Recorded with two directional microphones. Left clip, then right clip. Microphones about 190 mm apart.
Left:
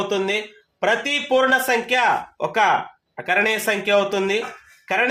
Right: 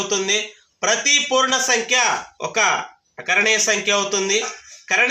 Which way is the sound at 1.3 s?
65° left (ahead or behind).